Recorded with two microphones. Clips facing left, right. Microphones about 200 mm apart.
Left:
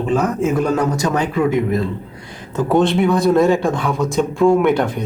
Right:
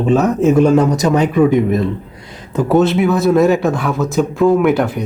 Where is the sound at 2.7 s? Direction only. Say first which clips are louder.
Right 2 dB; 5° right (ahead or behind).